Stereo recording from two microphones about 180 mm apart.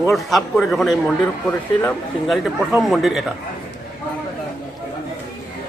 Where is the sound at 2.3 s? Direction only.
Centre (ahead or behind).